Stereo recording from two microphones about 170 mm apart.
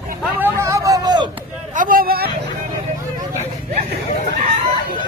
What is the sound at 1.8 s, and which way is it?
Vehicle, 55° right (ahead or behind).